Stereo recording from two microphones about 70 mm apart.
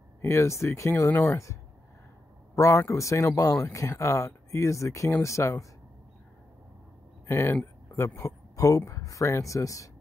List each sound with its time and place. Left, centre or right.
0.2 s speech: left
1.1 s speech: left
2.5 s speech: left
7.2 s speech: left
8.3 s speech: left